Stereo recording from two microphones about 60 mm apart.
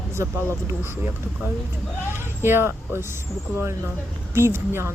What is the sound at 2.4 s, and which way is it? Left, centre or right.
Speech, right.